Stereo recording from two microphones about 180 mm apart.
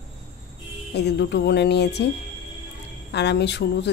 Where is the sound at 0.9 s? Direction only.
70° left (ahead or behind).